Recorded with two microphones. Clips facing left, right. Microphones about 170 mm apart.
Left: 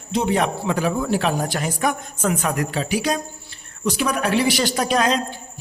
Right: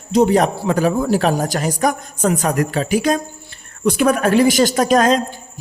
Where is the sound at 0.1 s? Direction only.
40° right (ahead or behind).